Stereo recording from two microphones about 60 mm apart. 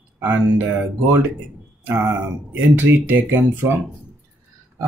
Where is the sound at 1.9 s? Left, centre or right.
Right.